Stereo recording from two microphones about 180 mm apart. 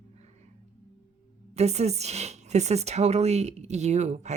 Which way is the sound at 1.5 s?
35° right (ahead or behind).